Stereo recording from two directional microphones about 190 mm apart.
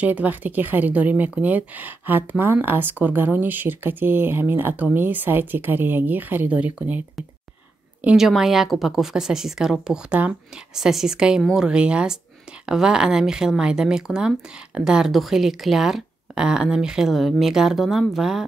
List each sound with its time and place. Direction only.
0.0 s speech: 10° right (ahead or behind)